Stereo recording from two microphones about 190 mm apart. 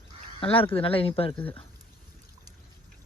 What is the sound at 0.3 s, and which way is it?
Speech, 30° left (ahead or behind).